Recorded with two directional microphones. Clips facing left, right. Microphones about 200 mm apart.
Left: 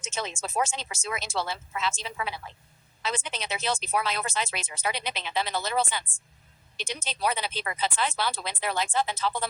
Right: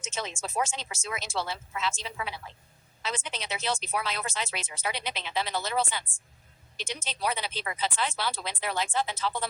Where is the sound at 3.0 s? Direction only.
55° left (ahead or behind).